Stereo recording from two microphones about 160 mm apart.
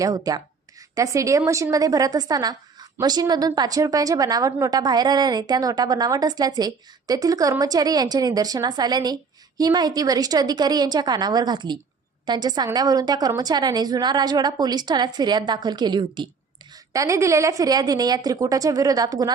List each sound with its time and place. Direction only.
0.0 s a woman's voice: 25° right (ahead or behind)